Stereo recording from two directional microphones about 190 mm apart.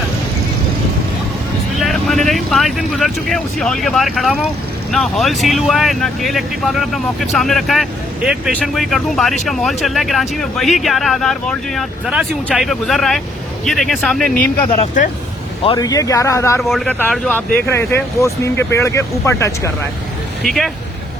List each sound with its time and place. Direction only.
1.8 s speech: centre (ahead or behind)
15.6 s speech: 20° left (ahead or behind)
16.6 s speech: centre (ahead or behind)
20.4 s speech: centre (ahead or behind)